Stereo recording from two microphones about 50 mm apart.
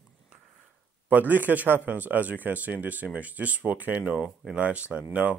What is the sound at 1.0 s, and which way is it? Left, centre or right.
A man's voice, right.